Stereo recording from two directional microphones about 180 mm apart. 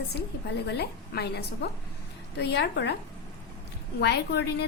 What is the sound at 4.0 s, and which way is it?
Speech, 65° left (ahead or behind).